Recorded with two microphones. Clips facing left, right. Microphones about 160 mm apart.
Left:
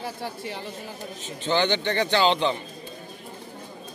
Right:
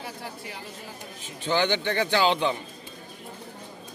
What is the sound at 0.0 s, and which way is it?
Speech, 30° left (ahead or behind).